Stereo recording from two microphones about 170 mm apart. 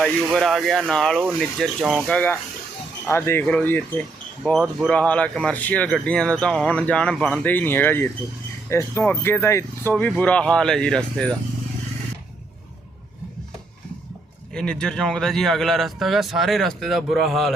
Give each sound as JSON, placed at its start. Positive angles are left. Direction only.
{"t": 0.0, "sound": "speech", "side_deg": 0}
{"t": 2.0, "sound": "speech", "side_deg": 10}
{"t": 14.5, "sound": "speech", "side_deg": 5}